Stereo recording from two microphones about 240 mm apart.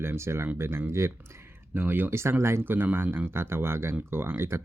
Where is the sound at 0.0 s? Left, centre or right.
Centre.